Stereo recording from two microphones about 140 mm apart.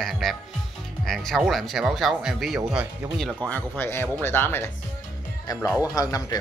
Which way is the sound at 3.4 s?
10° left (ahead or behind).